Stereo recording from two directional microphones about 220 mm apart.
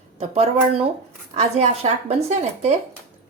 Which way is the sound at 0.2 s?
30° right (ahead or behind).